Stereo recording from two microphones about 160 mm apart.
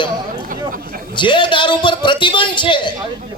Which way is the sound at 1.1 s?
30° left (ahead or behind).